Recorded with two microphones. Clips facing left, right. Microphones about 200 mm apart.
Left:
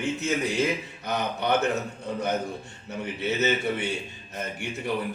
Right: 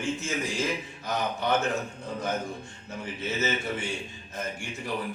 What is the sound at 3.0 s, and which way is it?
A man's voice, 65° left (ahead or behind).